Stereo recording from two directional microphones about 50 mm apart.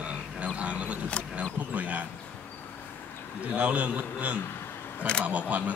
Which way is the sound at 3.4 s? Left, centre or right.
Right.